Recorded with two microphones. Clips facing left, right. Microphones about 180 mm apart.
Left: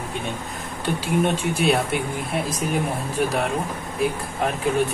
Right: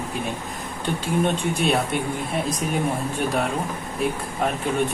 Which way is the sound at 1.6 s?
5° left (ahead or behind).